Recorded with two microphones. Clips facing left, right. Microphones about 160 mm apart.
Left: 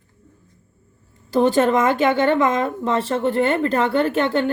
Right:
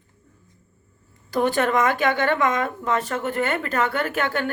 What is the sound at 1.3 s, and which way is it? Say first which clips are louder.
A woman's voice: left 5 dB; 25° left (ahead or behind).